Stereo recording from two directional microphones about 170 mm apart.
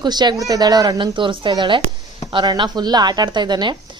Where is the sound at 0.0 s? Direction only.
25° right (ahead or behind).